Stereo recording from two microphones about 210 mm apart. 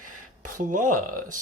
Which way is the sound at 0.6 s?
40° right (ahead or behind).